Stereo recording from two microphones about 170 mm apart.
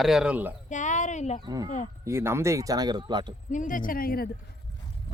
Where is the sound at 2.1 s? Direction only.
15° right (ahead or behind).